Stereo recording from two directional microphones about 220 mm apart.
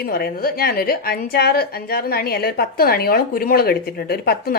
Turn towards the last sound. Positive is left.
turn(degrees=45)  # may be behind; listen again after turning